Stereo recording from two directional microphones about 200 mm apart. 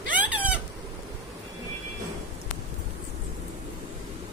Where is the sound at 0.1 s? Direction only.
5° right (ahead or behind).